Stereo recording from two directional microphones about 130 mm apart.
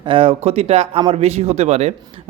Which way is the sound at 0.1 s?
50° right (ahead or behind).